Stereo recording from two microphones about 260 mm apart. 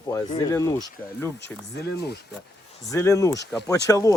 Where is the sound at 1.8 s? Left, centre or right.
Left.